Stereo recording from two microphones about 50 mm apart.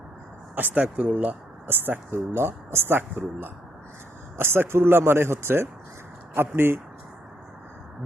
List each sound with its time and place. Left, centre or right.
0.5 s speech: right
1.1 s speech: right